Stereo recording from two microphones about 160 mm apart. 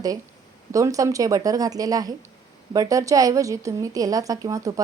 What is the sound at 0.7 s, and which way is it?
A woman's voice, 20° right (ahead or behind).